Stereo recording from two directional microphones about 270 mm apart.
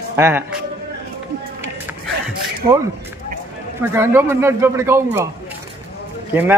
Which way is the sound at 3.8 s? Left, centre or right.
Centre.